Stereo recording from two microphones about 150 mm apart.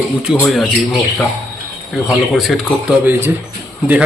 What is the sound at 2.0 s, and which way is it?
Speech, centre (ahead or behind).